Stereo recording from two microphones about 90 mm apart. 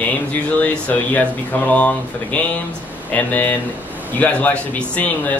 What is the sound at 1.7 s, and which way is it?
Speech, 15° left (ahead or behind).